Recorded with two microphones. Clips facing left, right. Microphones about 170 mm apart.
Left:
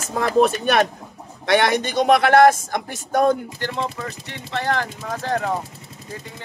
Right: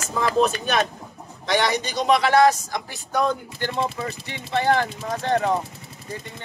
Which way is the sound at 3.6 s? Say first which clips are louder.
Right 1 dB; 5° right (ahead or behind).